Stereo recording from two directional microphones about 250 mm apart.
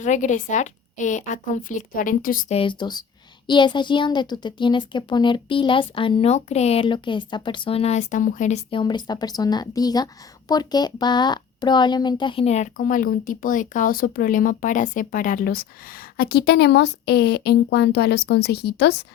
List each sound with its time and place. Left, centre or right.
0.0 s a child's voice: left